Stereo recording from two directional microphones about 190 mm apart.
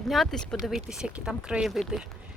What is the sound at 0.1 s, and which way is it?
Speech, centre (ahead or behind).